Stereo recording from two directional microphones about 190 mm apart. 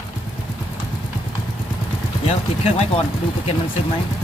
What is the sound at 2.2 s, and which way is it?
Speech, 30° left (ahead or behind).